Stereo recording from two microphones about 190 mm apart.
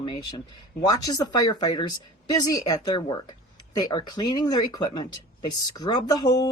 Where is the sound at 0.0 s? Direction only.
25° left (ahead or behind).